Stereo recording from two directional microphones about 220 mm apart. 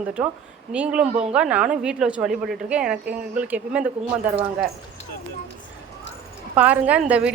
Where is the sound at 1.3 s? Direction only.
5° right (ahead or behind).